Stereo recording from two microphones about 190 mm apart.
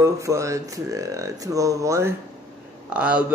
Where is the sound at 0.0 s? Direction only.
15° right (ahead or behind).